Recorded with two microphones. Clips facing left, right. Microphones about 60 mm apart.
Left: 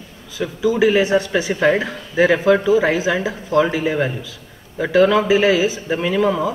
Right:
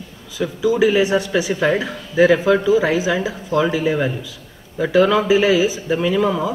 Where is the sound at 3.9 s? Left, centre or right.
Centre.